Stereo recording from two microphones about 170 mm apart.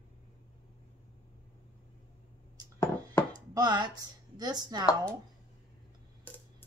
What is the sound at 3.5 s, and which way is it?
A woman's voice, 25° right (ahead or behind).